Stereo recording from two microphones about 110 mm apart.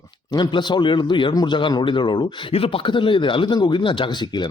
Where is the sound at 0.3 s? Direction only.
40° left (ahead or behind).